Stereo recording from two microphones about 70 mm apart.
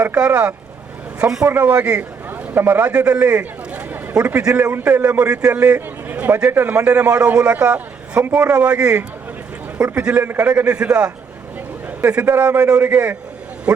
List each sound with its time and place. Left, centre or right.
0.2 s a man's voice: centre
4.7 s a man's voice: right